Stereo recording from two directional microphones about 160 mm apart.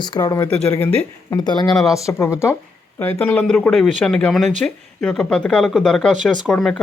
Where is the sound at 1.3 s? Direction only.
25° left (ahead or behind).